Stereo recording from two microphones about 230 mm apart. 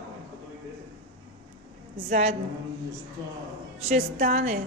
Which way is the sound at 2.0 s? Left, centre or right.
Right.